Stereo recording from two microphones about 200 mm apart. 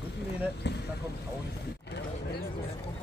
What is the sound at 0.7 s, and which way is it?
Boat, 60° left (ahead or behind).